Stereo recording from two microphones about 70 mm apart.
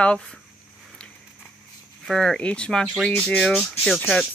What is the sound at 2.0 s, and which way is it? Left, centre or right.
Speech, centre.